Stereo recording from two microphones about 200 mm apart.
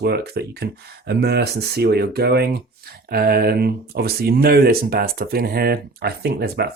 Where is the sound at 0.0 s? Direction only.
55° right (ahead or behind).